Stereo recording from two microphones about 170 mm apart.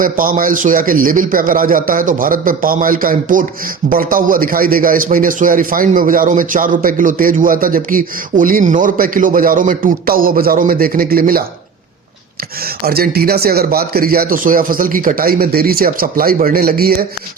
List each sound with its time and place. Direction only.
0.0 s a man's voice: 55° right (ahead or behind)
12.8 s a man's voice: 65° right (ahead or behind)